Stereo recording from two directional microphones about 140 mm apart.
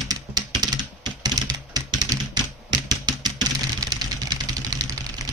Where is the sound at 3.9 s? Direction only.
25° right (ahead or behind).